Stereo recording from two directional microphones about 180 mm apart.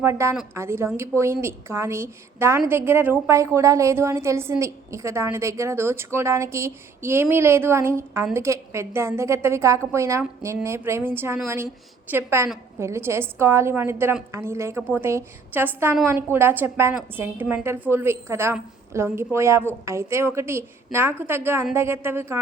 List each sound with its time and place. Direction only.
0.0 s a woman's voice: 15° right (ahead or behind)